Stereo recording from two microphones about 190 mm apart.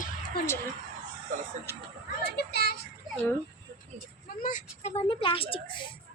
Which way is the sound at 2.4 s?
60° left (ahead or behind).